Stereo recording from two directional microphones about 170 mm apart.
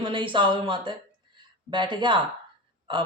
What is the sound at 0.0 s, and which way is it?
A man's voice, 30° right (ahead or behind).